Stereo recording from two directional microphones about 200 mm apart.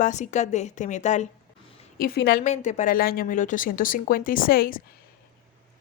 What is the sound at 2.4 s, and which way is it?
Speech, 35° left (ahead or behind).